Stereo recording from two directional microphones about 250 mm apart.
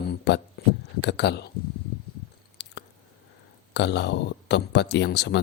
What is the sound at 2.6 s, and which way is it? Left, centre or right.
Chewing, left.